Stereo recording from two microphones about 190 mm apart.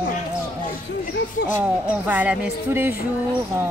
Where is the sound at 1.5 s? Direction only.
10° right (ahead or behind).